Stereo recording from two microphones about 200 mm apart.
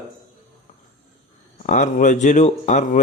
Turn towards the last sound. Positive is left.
turn(degrees=35)  # may be behind; listen again after turning